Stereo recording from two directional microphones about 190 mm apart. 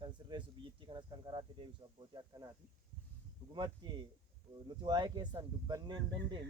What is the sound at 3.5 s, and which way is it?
Speech, 20° right (ahead or behind).